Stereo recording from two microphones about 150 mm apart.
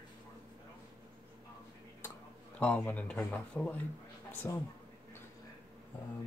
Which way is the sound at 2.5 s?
10° left (ahead or behind).